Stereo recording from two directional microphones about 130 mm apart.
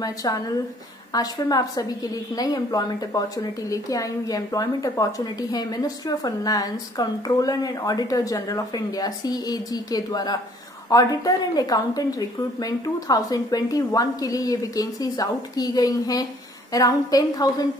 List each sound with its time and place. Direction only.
0.0 s a woman's voice: 30° left (ahead or behind)